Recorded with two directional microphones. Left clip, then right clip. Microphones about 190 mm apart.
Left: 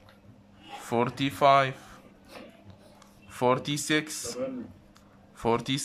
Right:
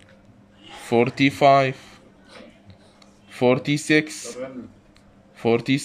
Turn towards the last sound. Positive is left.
turn(degrees=-5)  # may be behind; listen again after turning